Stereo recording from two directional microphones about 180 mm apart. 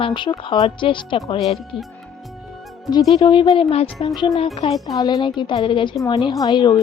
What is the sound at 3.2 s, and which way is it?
Speech, 30° left (ahead or behind).